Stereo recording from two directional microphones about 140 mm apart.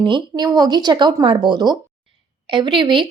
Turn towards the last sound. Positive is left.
turn(degrees=-35)  # may be behind; listen again after turning